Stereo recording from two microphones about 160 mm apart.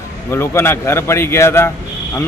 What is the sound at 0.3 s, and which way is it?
A man's voice, 15° left (ahead or behind).